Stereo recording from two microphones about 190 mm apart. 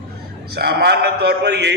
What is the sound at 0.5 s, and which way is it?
A man's voice, 55° right (ahead or behind).